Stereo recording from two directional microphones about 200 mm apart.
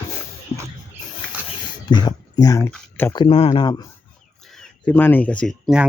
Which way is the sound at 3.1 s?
25° left (ahead or behind).